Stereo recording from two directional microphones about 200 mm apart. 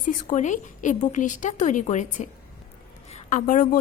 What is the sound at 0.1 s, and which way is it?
A woman's voice, 35° left (ahead or behind).